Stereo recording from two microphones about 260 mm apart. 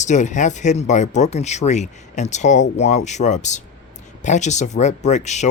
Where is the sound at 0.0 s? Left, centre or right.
Left.